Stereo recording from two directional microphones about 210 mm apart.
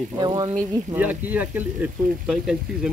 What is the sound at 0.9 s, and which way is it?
Speech, 10° right (ahead or behind).